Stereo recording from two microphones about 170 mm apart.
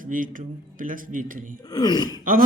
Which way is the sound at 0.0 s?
55° right (ahead or behind).